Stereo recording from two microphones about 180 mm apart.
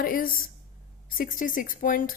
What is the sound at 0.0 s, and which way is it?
A woman's voice, 50° left (ahead or behind).